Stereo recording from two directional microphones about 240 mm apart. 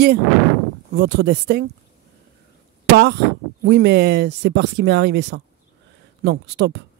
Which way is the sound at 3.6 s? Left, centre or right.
Right.